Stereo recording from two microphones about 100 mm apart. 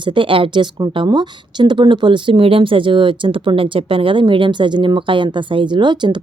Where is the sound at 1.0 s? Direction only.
45° right (ahead or behind).